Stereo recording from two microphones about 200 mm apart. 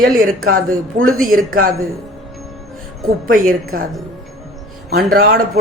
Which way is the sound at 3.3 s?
45° right (ahead or behind).